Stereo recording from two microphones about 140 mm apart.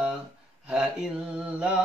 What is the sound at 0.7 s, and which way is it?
Speech, 5° right (ahead or behind).